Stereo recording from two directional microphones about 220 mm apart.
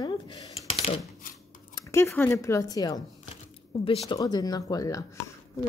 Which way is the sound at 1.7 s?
10° left (ahead or behind).